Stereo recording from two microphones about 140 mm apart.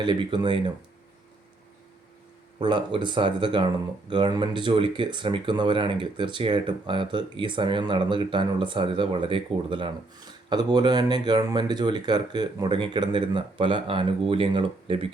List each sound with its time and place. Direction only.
0.0 s speech: 35° right (ahead or behind)
2.6 s speech: 35° right (ahead or behind)